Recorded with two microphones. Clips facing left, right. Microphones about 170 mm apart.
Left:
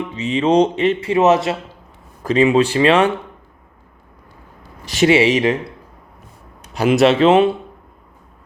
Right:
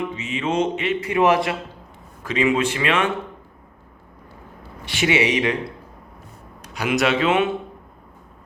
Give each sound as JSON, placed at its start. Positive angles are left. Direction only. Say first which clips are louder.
{"t": 0.2, "sound": "speech", "louder": "left 10 dB", "side_deg": 35}
{"t": 2.2, "sound": "speech", "louder": "left 6 dB", "side_deg": 35}
{"t": 4.9, "sound": "speech", "louder": "left 7 dB", "side_deg": 35}
{"t": 7.0, "sound": "speech", "louder": "left 8 dB", "side_deg": 30}